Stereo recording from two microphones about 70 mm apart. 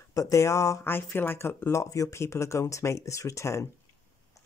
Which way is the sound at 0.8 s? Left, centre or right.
Left.